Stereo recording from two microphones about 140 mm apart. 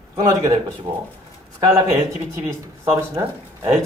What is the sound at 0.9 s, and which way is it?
Speech, 30° right (ahead or behind).